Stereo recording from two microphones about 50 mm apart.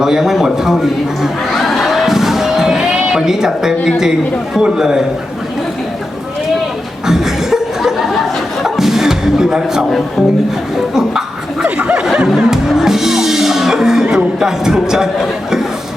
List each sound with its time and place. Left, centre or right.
0.0 s a man's voice: centre
1.6 s a sound: centre
4.5 s a man's voice: centre
7.1 s chuckle: centre
8.6 s music: centre
11.6 s a sound: right
12.0 s music: centre
14.3 s a man's voice: centre